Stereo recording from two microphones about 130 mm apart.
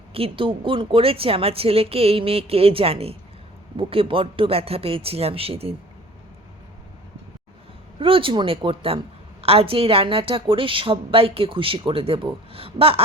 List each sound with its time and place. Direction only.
0.1 s a woman's voice: 45° right (ahead or behind)
7.9 s a woman's voice: 45° right (ahead or behind)